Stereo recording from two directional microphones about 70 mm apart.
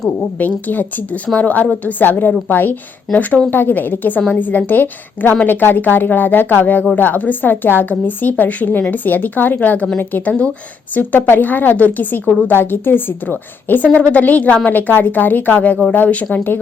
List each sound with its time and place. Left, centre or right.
0.3 s a woman's voice: left